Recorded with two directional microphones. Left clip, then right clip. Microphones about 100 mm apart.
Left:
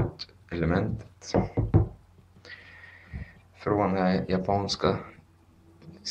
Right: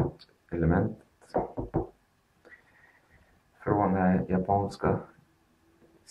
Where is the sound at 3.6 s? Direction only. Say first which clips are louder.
Left 1 dB; 25° left (ahead or behind).